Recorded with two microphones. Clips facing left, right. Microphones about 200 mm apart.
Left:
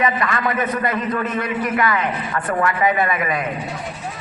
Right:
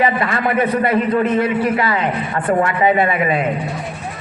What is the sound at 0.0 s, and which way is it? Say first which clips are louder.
A man's voice: right 3 dB; 30° right (ahead or behind).